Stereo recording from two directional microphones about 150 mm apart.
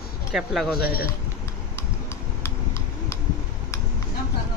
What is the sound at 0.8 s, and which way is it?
Speech, 90° left.